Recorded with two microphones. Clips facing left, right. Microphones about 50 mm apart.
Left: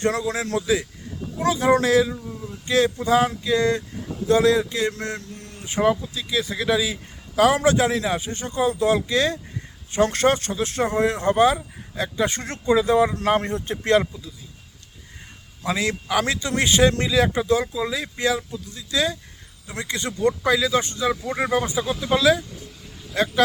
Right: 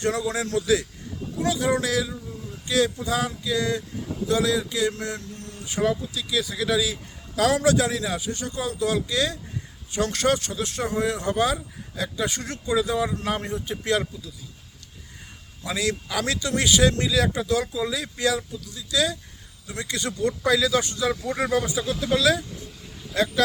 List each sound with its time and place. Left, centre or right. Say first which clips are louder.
0.0 s speech: left 2 dB; left
0.6 s a man's voice: even; left
15.6 s speech: left 3 dB; left
21.2 s speech: left 1 dB; centre